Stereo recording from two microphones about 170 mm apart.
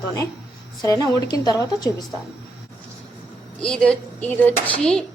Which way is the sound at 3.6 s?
5° left (ahead or behind).